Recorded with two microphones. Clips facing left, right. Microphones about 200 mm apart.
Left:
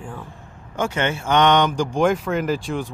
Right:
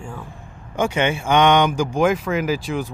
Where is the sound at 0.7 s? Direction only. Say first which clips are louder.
Right 3 dB; 15° right (ahead or behind).